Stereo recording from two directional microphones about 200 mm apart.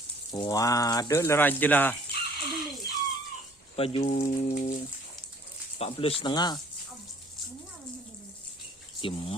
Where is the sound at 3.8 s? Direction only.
30° left (ahead or behind).